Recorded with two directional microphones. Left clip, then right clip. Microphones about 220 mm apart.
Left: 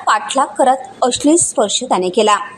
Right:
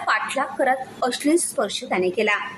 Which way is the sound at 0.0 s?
15° left (ahead or behind).